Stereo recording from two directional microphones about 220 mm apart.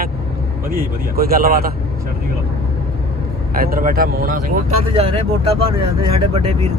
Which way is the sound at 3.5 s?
40° right (ahead or behind).